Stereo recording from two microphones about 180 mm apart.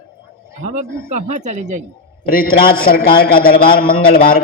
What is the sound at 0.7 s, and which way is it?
Speech, 40° right (ahead or behind).